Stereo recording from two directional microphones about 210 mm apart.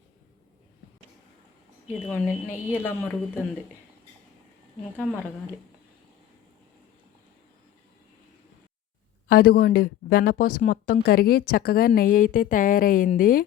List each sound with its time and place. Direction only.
2.0 s speech: 10° right (ahead or behind)
2.8 s a woman's voice: 10° left (ahead or behind)
9.3 s speech: 50° left (ahead or behind)